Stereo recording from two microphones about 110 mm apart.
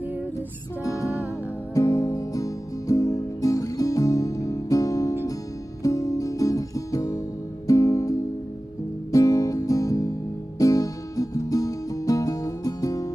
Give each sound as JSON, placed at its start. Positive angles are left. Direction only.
{"t": 0.8, "sound": "music", "side_deg": 30}